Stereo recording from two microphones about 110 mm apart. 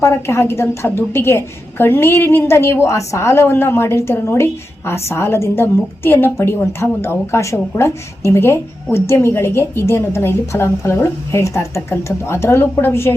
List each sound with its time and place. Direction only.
0.0 s a woman's voice: 25° left (ahead or behind)